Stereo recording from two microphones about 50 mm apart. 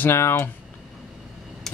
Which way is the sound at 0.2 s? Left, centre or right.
Left.